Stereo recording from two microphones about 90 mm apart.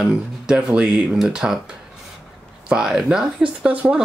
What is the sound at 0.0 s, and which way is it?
Speech, 10° right (ahead or behind).